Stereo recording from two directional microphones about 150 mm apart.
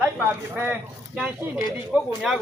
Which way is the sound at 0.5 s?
10° right (ahead or behind).